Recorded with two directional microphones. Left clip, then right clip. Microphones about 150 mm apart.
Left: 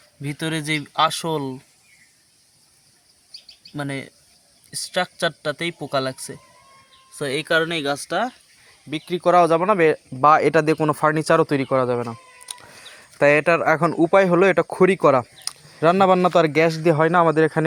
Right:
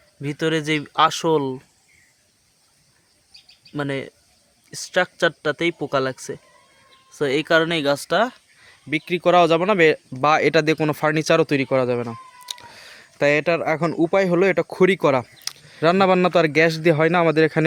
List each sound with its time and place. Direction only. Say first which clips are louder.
0.2 s speech: right 5 dB; 30° right (ahead or behind)
3.8 s speech: right 3 dB; 35° right (ahead or behind); by 8.4 s 55° right (ahead or behind)
8.9 s speech: right 1 dB; 40° right (ahead or behind); by 12.1 s 20° right (ahead or behind)
12.8 s a sound: left 3 dB; 5° right (ahead or behind)
14.0 s speech: left 2 dB; centre (ahead or behind); by 17.7 s 25° right (ahead or behind)